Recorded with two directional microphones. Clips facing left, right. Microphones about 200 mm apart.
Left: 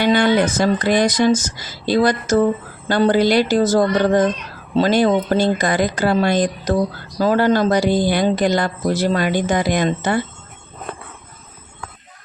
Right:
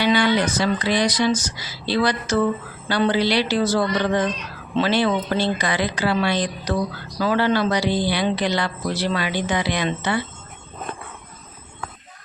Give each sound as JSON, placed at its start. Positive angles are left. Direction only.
{"t": 0.0, "sound": "speech", "side_deg": 50}